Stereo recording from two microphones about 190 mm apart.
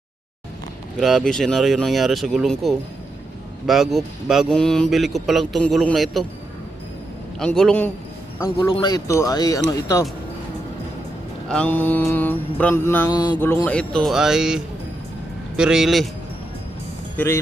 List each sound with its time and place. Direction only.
0.9 s speech: centre (ahead or behind)
7.3 s speech: centre (ahead or behind)
8.4 s speech: 20° left (ahead or behind)
11.4 s mantra: 5° left (ahead or behind)
13.4 s speech: 10° left (ahead or behind)
17.2 s mantra: 15° left (ahead or behind)